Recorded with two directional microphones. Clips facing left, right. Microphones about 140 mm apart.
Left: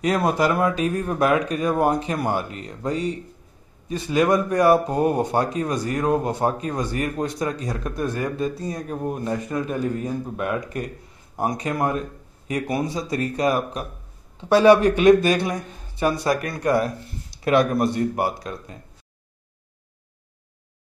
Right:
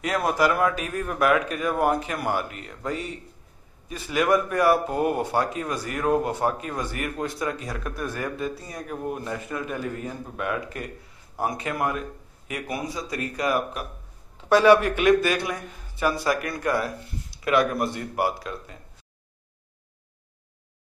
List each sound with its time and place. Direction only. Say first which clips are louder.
0.0 s speech: left 3 dB; 20° left (ahead or behind)